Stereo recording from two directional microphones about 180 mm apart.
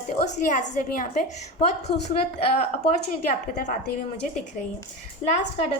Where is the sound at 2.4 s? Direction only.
35° left (ahead or behind).